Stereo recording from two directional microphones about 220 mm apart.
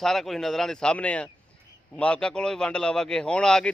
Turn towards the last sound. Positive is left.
turn(degrees=5)  # may be behind; listen again after turning